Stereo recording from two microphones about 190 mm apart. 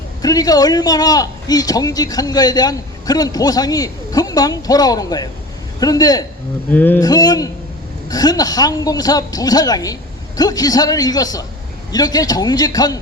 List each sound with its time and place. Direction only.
0.2 s a man's voice: 20° left (ahead or behind)
7.1 s a man's voice: 20° left (ahead or behind)